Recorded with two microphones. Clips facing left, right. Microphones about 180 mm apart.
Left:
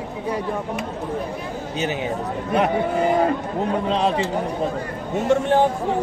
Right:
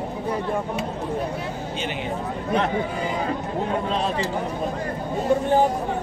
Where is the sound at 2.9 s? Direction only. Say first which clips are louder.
Left 7 dB; 55° left (ahead or behind).